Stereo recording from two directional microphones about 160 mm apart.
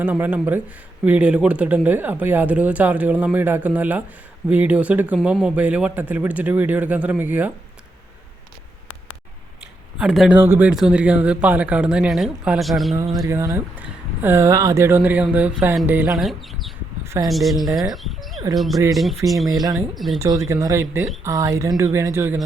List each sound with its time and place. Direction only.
0.0 s speech: 10° right (ahead or behind)
10.0 s speech: 5° right (ahead or behind)
13.1 s speech: 20° right (ahead or behind)
16.2 s speech: centre (ahead or behind)
19.5 s speech: 20° right (ahead or behind)
19.9 s speech: centre (ahead or behind)
20.2 s speech: 20° right (ahead or behind)